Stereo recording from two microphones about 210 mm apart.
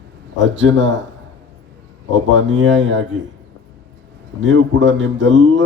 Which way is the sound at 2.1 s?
60° right (ahead or behind).